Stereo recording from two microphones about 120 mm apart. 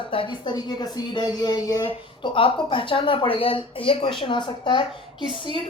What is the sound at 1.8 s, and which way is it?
Speech, 45° left (ahead or behind).